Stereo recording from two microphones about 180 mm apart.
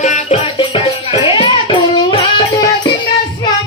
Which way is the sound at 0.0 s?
40° left (ahead or behind).